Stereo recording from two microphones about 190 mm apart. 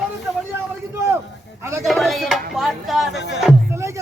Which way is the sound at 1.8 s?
Centre (ahead or behind).